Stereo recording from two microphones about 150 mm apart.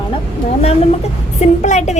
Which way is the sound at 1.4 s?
50° left (ahead or behind).